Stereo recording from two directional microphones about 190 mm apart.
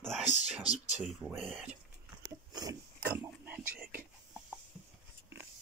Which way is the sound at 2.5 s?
20° right (ahead or behind).